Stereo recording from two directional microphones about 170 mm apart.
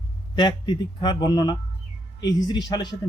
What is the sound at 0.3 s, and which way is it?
Speech, 30° left (ahead or behind).